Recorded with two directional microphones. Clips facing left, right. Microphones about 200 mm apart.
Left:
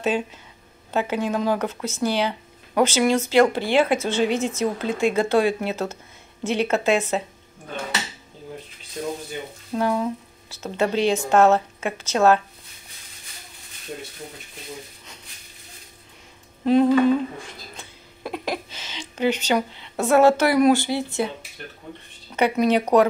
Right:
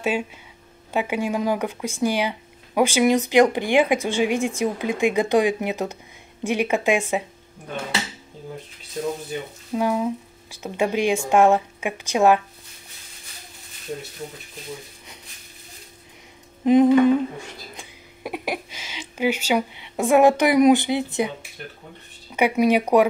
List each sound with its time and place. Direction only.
0.0 s speech: 10° right (ahead or behind)
9.8 s speech: 10° right (ahead or behind)
16.6 s speech: 15° right (ahead or behind)
17.7 s a sound: 10° right (ahead or behind)
22.3 s speech: 10° right (ahead or behind)